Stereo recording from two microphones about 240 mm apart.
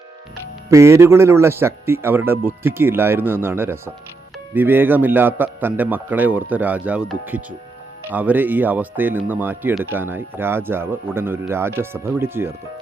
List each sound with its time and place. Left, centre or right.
0.7 s speech: centre